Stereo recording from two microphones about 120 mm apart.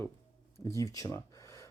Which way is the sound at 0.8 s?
30° left (ahead or behind).